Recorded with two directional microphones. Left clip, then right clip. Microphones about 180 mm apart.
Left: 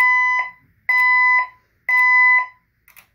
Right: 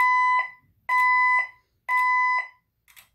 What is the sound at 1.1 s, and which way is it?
Alarm, 50° right (ahead or behind).